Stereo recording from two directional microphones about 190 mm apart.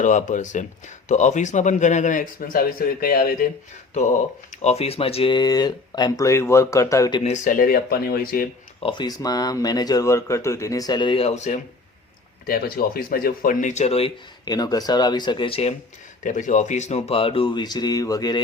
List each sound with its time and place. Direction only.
0.0 s speech: 40° left (ahead or behind)
3.9 s speech: 35° left (ahead or behind); by 7.2 s 15° left (ahead or behind)
7.2 s speech: 35° left (ahead or behind)
8.8 s speech: 25° left (ahead or behind)
12.5 s speech: 50° left (ahead or behind); by 15.7 s 30° left (ahead or behind)
16.2 s speech: 40° left (ahead or behind); by 18.4 s 20° left (ahead or behind)